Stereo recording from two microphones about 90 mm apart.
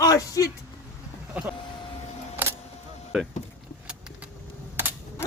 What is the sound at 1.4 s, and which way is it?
Speech, 15° right (ahead or behind).